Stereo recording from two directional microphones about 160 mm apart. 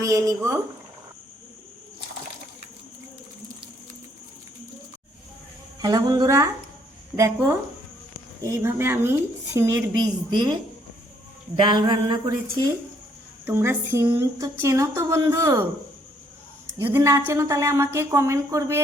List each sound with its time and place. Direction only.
0.0 s speech: 20° right (ahead or behind)
5.8 s a woman's voice: 25° right (ahead or behind)
11.6 s speech: 25° right (ahead or behind)
13.4 s a woman's voice: 15° right (ahead or behind)
16.7 s a woman's voice: 15° right (ahead or behind)